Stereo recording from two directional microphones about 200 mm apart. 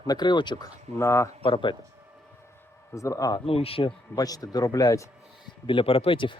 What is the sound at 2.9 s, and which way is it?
Speech, 15° left (ahead or behind).